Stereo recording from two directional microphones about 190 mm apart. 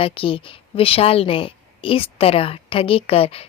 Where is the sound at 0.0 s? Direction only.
30° left (ahead or behind).